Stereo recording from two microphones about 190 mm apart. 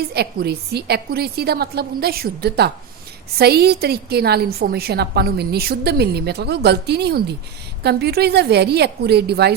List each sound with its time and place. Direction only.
0.1 s a woman's voice: 55° right (ahead or behind)